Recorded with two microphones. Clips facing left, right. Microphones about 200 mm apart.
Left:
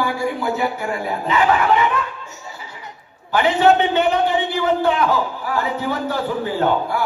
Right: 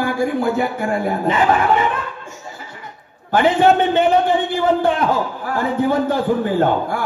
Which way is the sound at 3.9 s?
50° right (ahead or behind).